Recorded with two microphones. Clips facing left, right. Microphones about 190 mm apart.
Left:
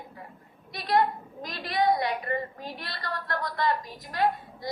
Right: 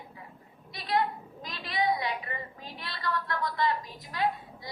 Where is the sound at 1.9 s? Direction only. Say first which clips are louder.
Left 5 dB; 50° left (ahead or behind).